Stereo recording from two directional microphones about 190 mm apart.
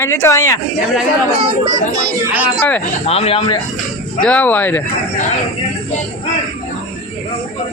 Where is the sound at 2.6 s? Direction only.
10° left (ahead or behind).